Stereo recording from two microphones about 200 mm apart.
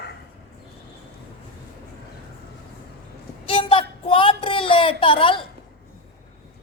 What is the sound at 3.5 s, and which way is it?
A woman's voice, 25° left (ahead or behind).